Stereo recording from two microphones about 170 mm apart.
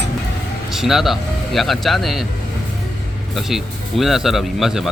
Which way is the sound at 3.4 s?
Centre (ahead or behind).